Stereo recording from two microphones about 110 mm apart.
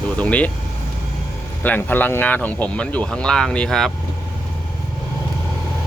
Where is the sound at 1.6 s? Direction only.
15° left (ahead or behind).